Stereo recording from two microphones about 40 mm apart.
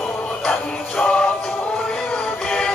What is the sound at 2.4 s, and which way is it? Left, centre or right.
Music, centre.